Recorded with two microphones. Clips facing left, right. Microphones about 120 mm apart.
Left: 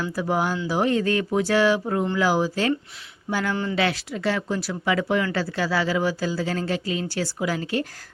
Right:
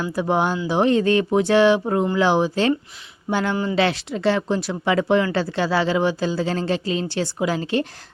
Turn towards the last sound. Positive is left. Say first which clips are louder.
# right 4 dB
turn(degrees=-25)  # may be behind; listen again after turning